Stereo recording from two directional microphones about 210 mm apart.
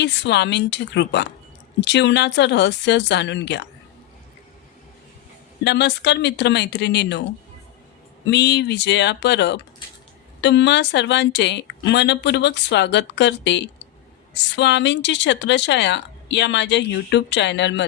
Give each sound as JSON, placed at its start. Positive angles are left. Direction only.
{"t": 0.0, "sound": "a woman's voice", "side_deg": 55}
{"t": 5.6, "sound": "speech", "side_deg": 55}
{"t": 8.3, "sound": "a woman's voice", "side_deg": 55}